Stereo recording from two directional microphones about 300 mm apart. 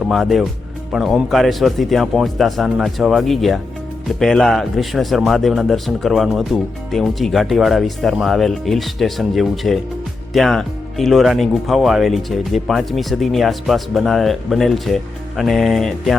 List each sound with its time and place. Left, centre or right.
0.1 s speech: centre